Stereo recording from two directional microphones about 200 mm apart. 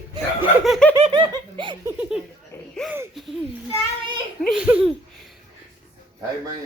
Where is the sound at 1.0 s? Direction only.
25° right (ahead or behind).